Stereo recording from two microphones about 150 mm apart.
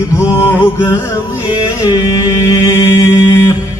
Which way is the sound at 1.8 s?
25° left (ahead or behind).